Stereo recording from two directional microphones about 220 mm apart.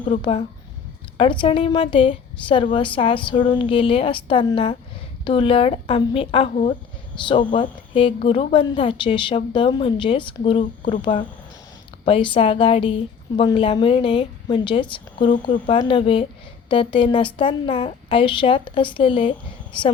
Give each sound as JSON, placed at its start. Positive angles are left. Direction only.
{"t": 0.0, "sound": "a woman's voice", "side_deg": 30}